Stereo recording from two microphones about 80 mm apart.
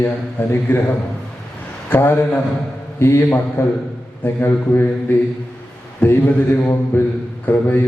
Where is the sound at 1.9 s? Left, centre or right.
Left.